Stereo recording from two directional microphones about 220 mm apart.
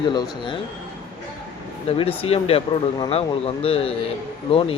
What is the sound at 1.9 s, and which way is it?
Speech, 25° left (ahead or behind).